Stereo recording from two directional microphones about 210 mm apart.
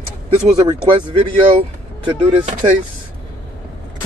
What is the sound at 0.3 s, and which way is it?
Speech, 20° right (ahead or behind).